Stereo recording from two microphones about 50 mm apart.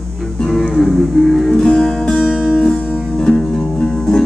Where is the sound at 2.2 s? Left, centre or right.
Centre.